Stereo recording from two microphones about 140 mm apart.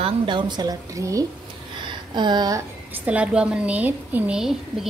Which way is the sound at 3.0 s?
10° right (ahead or behind).